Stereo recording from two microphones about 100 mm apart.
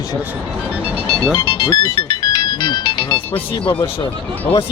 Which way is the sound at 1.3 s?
35° left (ahead or behind).